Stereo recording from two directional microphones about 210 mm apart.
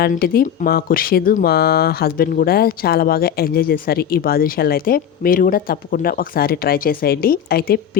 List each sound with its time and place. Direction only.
0.0 s speech: 45° left (ahead or behind)